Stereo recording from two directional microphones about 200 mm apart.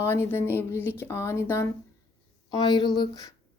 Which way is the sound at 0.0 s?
10° left (ahead or behind).